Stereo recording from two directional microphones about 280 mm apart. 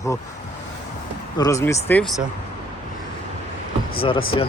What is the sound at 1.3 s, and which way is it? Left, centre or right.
Speech, centre.